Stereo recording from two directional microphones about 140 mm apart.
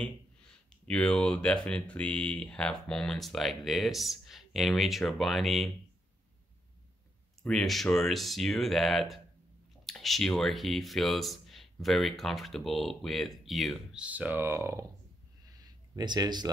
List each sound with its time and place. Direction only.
0.8 s speech: 10° left (ahead or behind)
7.4 s speech: centre (ahead or behind); by 14.9 s 20° right (ahead or behind)
15.6 s a sound: 30° right (ahead or behind)